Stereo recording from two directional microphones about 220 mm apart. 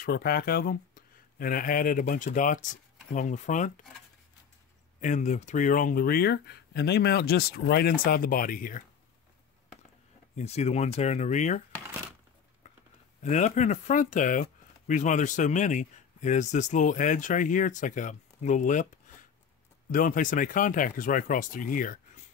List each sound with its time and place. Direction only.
0.0 s speech: 45° left (ahead or behind)
5.0 s speech: 35° left (ahead or behind)
10.3 s speech: 30° left (ahead or behind)
13.2 s speech: 30° left (ahead or behind)